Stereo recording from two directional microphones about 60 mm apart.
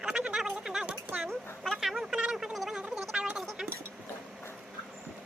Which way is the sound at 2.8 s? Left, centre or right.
Centre.